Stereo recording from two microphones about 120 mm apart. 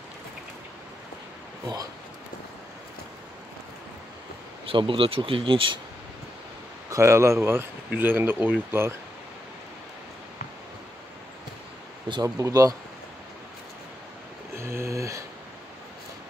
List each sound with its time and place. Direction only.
4.6 s speech: 45° right (ahead or behind)
6.9 s speech: 25° right (ahead or behind)
12.1 s speech: 30° right (ahead or behind)
14.5 s a sound: 20° right (ahead or behind)